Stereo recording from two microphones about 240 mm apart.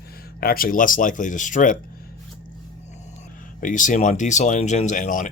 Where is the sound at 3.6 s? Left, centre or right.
Left.